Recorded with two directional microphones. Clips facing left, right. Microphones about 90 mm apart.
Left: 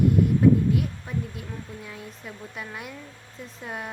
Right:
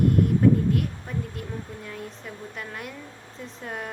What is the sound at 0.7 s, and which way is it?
Speech, 5° left (ahead or behind).